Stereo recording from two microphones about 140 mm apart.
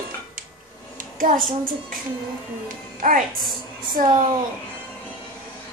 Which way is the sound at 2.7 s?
75° right (ahead or behind).